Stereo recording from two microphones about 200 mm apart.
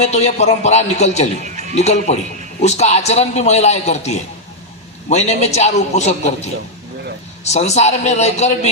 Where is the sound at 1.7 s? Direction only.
35° left (ahead or behind).